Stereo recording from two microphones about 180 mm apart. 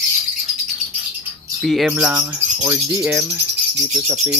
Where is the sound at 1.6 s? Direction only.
5° right (ahead or behind).